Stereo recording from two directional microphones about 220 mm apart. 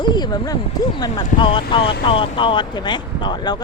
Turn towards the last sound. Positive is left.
turn(degrees=20)  # may be behind; listen again after turning